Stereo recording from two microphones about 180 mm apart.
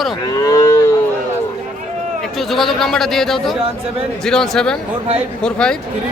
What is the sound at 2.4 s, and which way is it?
A man's voice, centre (ahead or behind).